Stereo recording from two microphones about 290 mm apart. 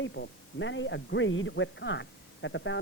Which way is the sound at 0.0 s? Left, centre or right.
Left.